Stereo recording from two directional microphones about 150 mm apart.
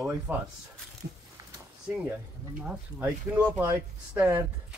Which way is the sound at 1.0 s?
90° right.